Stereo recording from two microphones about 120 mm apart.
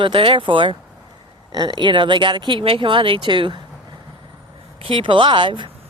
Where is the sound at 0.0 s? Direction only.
50° right (ahead or behind).